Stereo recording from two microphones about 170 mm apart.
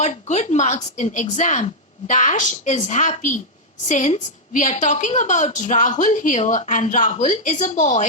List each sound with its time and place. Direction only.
0.0 s a woman's voice: 45° left (ahead or behind)